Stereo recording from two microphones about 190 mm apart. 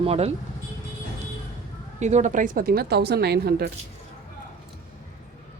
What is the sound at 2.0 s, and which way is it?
Speech, 40° right (ahead or behind).